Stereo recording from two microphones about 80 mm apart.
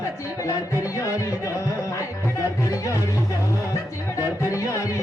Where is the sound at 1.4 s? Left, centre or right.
Left.